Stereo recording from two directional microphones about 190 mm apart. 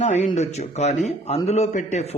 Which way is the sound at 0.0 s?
35° left (ahead or behind).